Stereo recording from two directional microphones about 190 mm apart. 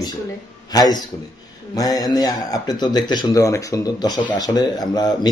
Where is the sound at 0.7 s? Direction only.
20° left (ahead or behind).